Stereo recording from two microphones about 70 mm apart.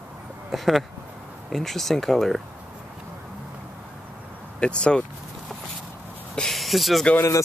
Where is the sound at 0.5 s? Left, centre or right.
Centre.